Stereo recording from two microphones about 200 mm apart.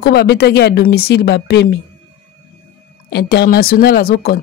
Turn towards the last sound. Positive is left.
turn(degrees=50)  # may be behind; listen again after turning